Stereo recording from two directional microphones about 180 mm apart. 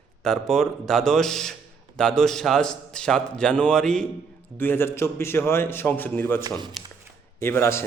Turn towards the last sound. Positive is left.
turn(degrees=15)  # may be behind; listen again after turning